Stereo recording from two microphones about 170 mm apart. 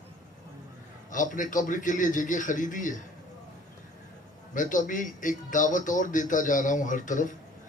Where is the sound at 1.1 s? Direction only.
50° left (ahead or behind).